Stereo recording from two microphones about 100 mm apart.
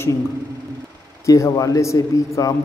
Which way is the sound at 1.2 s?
35° left (ahead or behind).